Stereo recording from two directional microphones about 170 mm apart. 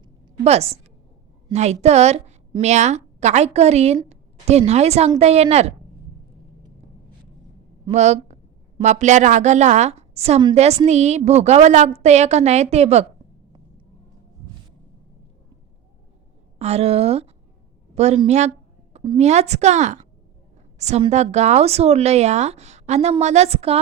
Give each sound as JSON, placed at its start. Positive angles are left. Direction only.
{"t": 0.4, "sound": "a woman's voice", "side_deg": -40}
{"t": 7.9, "sound": "a woman's voice", "side_deg": -40}
{"t": 16.6, "sound": "a woman's voice", "side_deg": -40}